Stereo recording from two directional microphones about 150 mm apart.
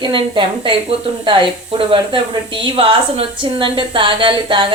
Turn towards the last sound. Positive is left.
turn(degrees=-35)  # may be behind; listen again after turning